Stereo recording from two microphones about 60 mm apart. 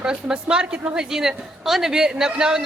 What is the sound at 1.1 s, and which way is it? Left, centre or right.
Speech, centre.